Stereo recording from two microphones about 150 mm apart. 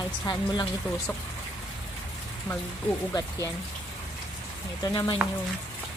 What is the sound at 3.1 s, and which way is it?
Speech, 25° left (ahead or behind).